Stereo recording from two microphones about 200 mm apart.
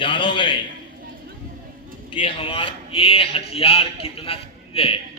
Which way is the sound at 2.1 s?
25° left (ahead or behind).